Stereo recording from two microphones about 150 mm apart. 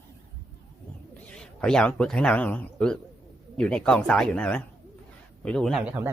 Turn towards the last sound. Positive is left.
turn(degrees=5)  # may be behind; listen again after turning